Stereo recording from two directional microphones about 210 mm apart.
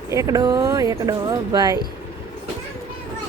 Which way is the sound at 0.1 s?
15° right (ahead or behind).